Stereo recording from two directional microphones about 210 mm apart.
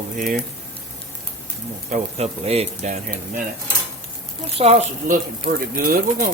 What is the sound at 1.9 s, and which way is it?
Speech, 30° right (ahead or behind).